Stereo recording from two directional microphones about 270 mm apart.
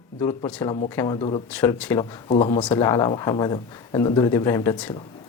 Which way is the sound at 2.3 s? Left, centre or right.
Centre.